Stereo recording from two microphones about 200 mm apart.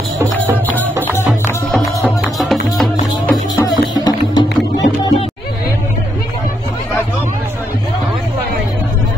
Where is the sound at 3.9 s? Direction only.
20° left (ahead or behind).